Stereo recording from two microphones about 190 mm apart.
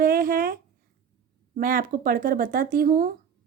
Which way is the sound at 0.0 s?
50° right (ahead or behind).